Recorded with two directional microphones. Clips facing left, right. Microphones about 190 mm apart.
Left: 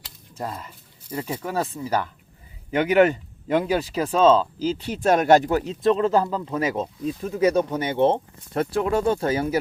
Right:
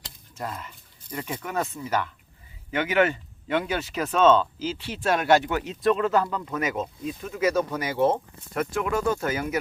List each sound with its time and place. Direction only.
0.3 s speech: 35° left (ahead or behind)